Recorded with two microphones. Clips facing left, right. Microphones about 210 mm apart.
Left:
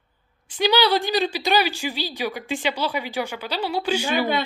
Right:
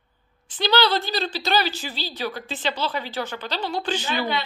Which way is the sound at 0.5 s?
10° left (ahead or behind).